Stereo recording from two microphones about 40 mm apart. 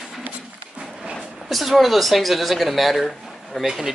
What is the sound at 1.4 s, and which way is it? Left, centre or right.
Speech, centre.